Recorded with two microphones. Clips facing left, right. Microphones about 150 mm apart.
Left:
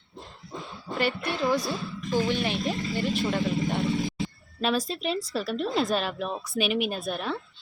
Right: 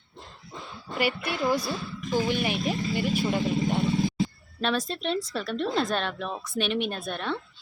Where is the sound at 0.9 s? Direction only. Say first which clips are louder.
Even; 10° right (ahead or behind).